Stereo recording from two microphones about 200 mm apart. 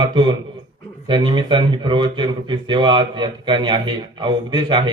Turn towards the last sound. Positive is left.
turn(degrees=-25)  # may be behind; listen again after turning